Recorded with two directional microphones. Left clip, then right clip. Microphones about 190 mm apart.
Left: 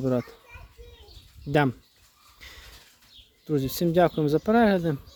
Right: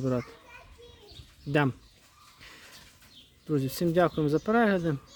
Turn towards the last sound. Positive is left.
turn(degrees=15)  # may be behind; listen again after turning